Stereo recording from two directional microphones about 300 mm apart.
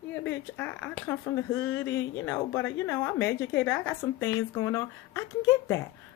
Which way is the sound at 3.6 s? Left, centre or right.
Centre.